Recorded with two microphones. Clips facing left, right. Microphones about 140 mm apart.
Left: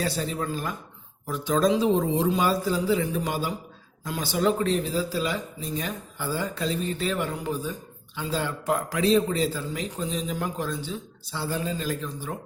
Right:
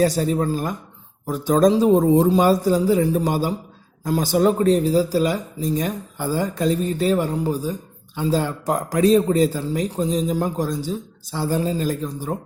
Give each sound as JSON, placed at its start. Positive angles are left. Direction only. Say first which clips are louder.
{"t": 0.0, "sound": "speech", "louder": "right 9 dB", "side_deg": -45}